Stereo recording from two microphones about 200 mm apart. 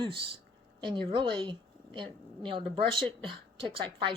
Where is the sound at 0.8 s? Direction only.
25° right (ahead or behind).